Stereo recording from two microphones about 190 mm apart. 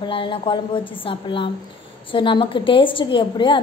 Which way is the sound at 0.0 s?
25° left (ahead or behind).